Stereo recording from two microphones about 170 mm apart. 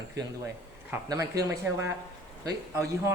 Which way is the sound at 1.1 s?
20° right (ahead or behind).